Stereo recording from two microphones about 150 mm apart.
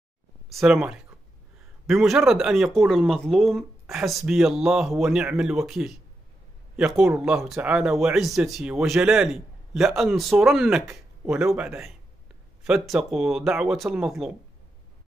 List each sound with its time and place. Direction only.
0.6 s speech: 5° right (ahead or behind)